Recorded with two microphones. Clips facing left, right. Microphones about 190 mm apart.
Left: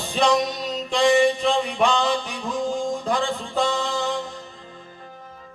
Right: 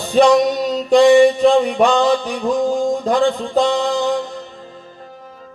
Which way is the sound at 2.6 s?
40° right (ahead or behind).